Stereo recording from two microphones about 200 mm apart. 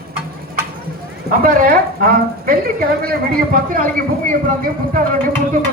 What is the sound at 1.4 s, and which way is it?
A woman's voice, 45° right (ahead or behind).